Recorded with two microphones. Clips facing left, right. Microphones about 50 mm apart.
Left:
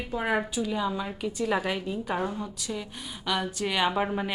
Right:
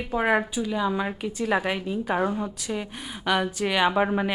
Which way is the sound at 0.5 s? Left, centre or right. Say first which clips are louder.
Right 2 dB; centre.